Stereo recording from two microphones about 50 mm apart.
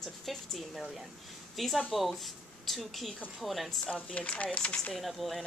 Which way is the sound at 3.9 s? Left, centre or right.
Left.